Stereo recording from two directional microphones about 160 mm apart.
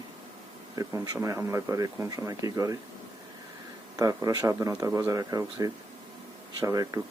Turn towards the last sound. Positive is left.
turn(degrees=-20)  # may be behind; listen again after turning